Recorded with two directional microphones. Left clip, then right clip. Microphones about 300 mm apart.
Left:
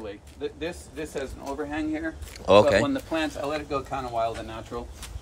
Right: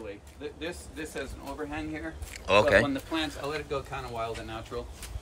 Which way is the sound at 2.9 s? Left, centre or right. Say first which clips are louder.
Left 4 dB; left.